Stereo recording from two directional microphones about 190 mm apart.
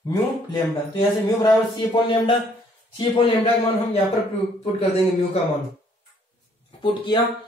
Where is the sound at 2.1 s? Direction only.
25° left (ahead or behind).